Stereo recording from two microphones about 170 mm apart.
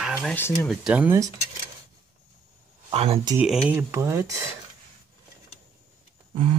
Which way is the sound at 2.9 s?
35° right (ahead or behind).